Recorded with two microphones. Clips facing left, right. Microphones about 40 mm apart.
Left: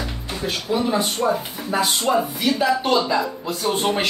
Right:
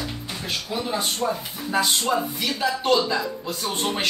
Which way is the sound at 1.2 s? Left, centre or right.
Centre.